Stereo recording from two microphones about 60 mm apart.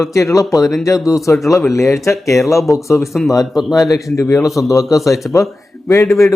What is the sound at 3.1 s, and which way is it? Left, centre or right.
Speech, centre.